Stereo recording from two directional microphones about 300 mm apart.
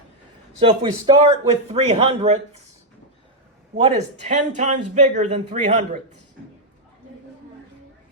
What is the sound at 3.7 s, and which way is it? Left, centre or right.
A man's voice, right.